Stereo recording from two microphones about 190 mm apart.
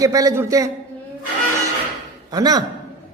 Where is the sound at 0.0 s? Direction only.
15° right (ahead or behind).